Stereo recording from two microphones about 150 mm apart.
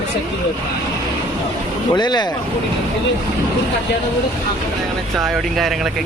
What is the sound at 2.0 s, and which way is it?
Speech, 30° left (ahead or behind).